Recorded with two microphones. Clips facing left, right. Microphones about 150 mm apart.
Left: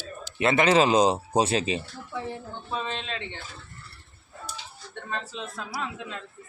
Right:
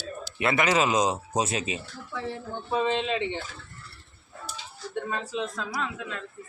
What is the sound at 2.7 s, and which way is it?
Speech, 15° right (ahead or behind).